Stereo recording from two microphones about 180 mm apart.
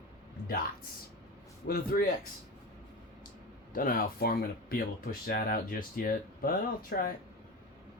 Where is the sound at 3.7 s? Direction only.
50° left (ahead or behind).